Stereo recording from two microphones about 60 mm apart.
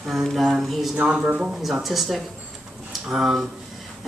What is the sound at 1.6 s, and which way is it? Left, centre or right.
Speech, centre.